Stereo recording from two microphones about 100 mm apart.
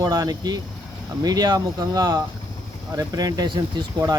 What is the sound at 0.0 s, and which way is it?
Speech, 40° right (ahead or behind).